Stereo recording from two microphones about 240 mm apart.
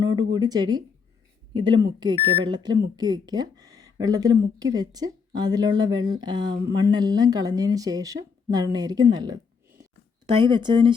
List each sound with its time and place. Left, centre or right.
0.0 s a sound: centre
0.3 s speech: centre
10.3 s speech: centre